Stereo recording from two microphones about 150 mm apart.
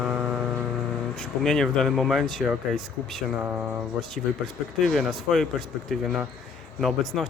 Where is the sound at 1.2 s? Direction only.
5° left (ahead or behind).